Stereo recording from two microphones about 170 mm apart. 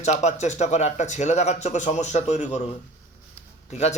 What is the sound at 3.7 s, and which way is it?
Speech, 40° left (ahead or behind).